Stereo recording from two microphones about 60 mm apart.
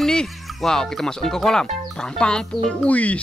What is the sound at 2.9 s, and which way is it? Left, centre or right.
Speech, left.